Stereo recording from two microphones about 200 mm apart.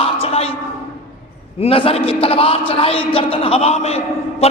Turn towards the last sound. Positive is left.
turn(degrees=30)  # may be behind; listen again after turning